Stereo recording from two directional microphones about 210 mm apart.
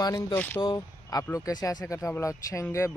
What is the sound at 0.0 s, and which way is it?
Speech, 15° left (ahead or behind).